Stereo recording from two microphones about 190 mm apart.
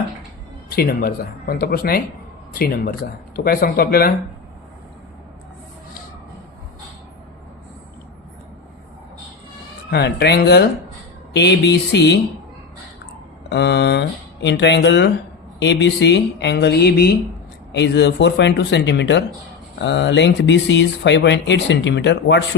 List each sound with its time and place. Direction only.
0.7 s a man's voice: 55° left (ahead or behind)
9.9 s speech: 60° left (ahead or behind)
13.5 s speech: 65° left (ahead or behind)